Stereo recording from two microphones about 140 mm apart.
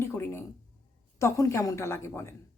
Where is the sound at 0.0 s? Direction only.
15° left (ahead or behind).